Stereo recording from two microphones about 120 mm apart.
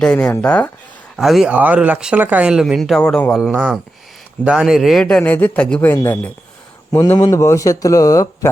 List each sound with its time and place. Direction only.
0.0 s a man's voice: 10° left (ahead or behind)
1.1 s speech: centre (ahead or behind)
1.5 s speech: 15° right (ahead or behind); by 3.5 s 5° left (ahead or behind)
3.5 s a man's voice: 10° right (ahead or behind); by 6.0 s 10° left (ahead or behind)
7.2 s a man's voice: 30° left (ahead or behind)